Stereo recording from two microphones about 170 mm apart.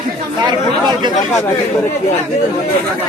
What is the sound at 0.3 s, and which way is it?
Speech, 25° right (ahead or behind).